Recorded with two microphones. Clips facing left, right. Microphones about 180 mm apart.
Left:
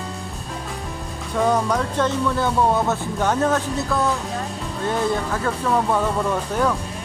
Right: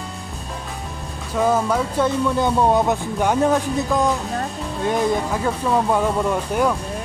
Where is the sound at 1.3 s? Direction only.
5° right (ahead or behind).